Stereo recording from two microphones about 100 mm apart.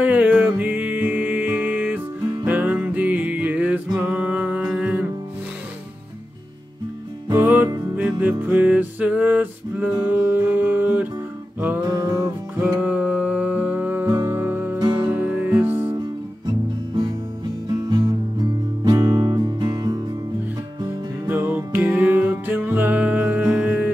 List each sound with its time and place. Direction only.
0.0 s music: 15° right (ahead or behind)
7.3 s music: 20° right (ahead or behind)
11.8 s music: 40° right (ahead or behind)
12.5 s music: 15° right (ahead or behind)
14.8 s music: 45° right (ahead or behind)
15.0 s music: 20° right (ahead or behind)
17.6 s music: 45° right (ahead or behind)
21.3 s music: 20° right (ahead or behind)